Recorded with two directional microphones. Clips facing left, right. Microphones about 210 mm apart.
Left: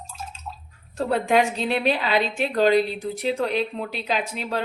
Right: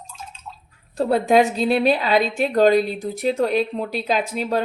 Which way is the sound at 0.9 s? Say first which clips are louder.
Right 4 dB; 35° right (ahead or behind).